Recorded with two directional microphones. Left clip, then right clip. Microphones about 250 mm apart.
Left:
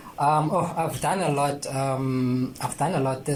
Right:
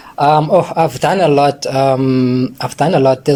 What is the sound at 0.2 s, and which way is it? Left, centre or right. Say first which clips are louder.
Speech: right 11 dB; right.